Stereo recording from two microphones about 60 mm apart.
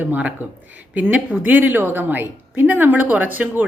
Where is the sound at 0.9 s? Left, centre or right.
Right.